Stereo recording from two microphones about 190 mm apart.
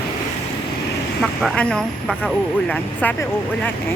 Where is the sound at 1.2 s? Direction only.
5° left (ahead or behind).